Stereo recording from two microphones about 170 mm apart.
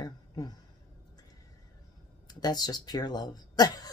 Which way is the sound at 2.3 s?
25° left (ahead or behind).